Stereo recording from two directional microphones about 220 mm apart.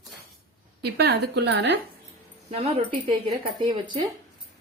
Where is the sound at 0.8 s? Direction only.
45° right (ahead or behind).